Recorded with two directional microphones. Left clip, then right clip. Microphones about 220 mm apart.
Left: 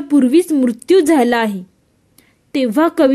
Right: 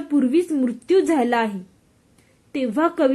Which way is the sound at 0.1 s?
40° left (ahead or behind).